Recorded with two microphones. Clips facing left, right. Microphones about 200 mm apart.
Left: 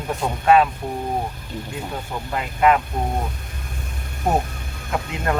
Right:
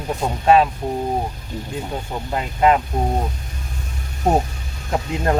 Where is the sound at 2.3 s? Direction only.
30° right (ahead or behind).